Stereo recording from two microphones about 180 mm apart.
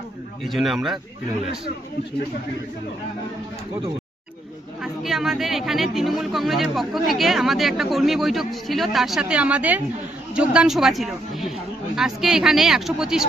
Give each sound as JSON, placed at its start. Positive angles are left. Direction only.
{"t": 0.4, "sound": "speech", "side_deg": 0}
{"t": 4.8, "sound": "speech", "side_deg": 0}